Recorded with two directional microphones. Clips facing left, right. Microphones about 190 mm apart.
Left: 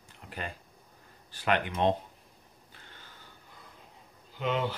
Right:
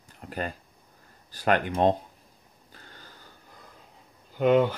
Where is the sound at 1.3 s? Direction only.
40° right (ahead or behind).